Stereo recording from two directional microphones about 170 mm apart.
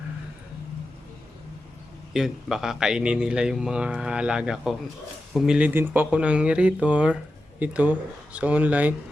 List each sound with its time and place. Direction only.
2.1 s speech: centre (ahead or behind)